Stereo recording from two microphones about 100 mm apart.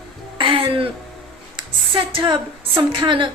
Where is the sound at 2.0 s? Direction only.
55° right (ahead or behind).